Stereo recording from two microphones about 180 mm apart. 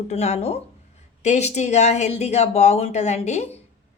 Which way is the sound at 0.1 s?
35° left (ahead or behind).